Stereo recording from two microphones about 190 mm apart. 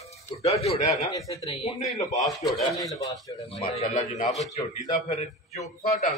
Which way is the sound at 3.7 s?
40° left (ahead or behind).